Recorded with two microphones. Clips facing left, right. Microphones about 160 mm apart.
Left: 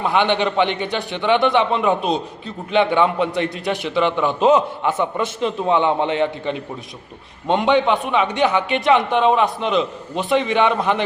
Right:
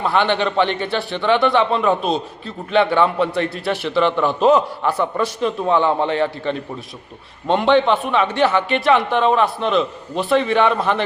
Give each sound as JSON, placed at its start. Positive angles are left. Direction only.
{"t": 0.1, "sound": "a man's voice", "side_deg": 20}